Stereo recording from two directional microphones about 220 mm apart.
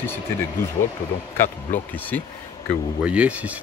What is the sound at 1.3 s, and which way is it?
Speech, 35° left (ahead or behind).